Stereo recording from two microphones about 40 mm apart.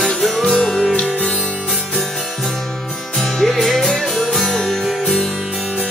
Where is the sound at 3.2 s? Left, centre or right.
Centre.